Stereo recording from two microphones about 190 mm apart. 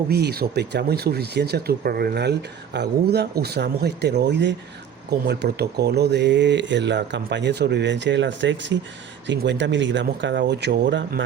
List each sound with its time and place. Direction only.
0.1 s speech: 55° right (ahead or behind)